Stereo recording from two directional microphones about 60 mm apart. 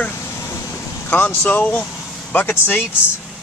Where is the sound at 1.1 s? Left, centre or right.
Left.